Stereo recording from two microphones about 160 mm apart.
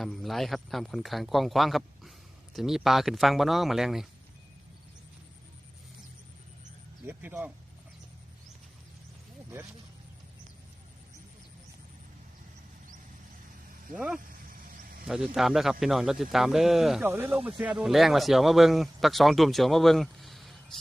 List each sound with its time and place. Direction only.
0.0 s a man's voice: centre (ahead or behind)
7.1 s speech: 10° right (ahead or behind)
13.9 s speech: 5° right (ahead or behind)
14.2 s a sound: 60° right (ahead or behind)
15.0 s speech: 5° right (ahead or behind)
17.1 s speech: 15° right (ahead or behind)